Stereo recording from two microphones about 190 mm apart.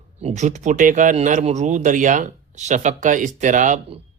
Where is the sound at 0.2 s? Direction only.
35° right (ahead or behind).